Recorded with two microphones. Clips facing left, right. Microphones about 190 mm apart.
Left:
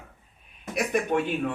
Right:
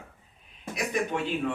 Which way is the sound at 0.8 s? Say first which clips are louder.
Left 4 dB; 60° left (ahead or behind).